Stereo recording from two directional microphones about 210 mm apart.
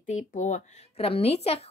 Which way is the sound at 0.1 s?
35° left (ahead or behind).